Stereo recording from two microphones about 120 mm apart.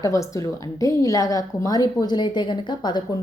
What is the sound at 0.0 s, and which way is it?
A woman's voice, 25° left (ahead or behind).